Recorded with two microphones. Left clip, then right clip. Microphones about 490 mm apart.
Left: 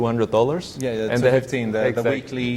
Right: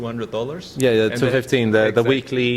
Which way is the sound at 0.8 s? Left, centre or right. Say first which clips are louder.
Right 8 dB; right.